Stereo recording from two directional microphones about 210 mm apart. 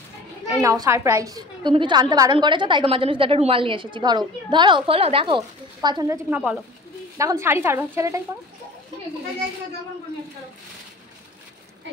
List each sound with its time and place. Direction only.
0.5 s a woman's voice: 15° right (ahead or behind)
6.3 s speech: 5° right (ahead or behind)